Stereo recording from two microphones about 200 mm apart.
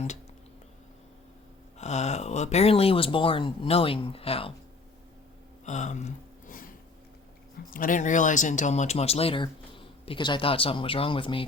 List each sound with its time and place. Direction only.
1.8 s speech: 35° left (ahead or behind)
5.6 s a sound: 35° left (ahead or behind)
7.7 s speech: 45° left (ahead or behind); by 11.4 s 25° left (ahead or behind)